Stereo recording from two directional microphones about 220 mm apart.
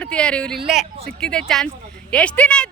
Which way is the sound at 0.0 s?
5° left (ahead or behind).